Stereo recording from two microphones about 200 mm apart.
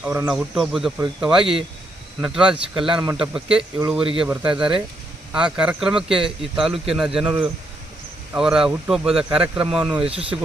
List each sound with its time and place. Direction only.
0.0 s speech: 5° right (ahead or behind)
2.8 s speech: 25° right (ahead or behind)
3.1 s speech: 5° right (ahead or behind)
10.1 s speech: 30° right (ahead or behind)